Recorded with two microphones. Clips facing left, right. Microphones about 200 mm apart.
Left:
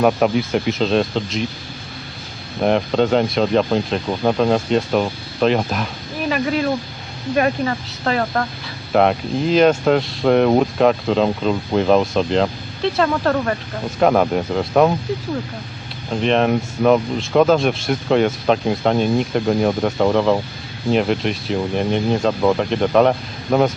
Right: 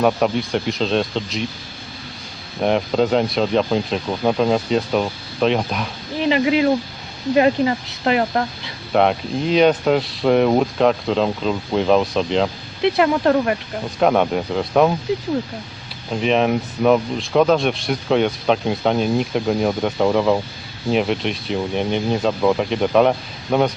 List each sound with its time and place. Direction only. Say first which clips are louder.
0.0 s speech: left 2 dB; 5° left (ahead or behind)
2.6 s speech: left 1 dB; centre (ahead or behind)
6.2 s speech: right 3 dB; 20° right (ahead or behind)
8.9 s speech: left 1 dB; centre (ahead or behind)
12.8 s speech: right 2 dB; 20° right (ahead or behind)
14.0 s speech: left 1 dB; centre (ahead or behind)
16.2 s speech: left 1 dB; centre (ahead or behind)